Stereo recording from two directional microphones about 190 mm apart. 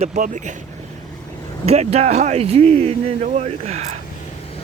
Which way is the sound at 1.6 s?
35° right (ahead or behind).